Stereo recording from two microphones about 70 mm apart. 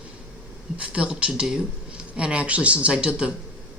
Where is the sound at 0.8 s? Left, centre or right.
Centre.